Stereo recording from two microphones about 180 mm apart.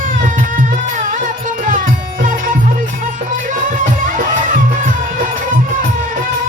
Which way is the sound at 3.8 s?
45° right (ahead or behind).